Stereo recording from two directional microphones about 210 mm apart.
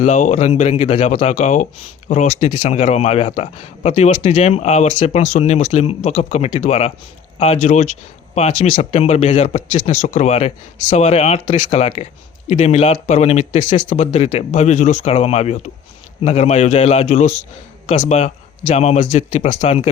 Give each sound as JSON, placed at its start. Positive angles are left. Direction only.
{"t": 0.0, "sound": "speech", "side_deg": 35}